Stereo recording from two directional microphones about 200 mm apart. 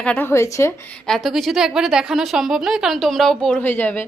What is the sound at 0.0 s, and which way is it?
A woman's voice, 10° left (ahead or behind).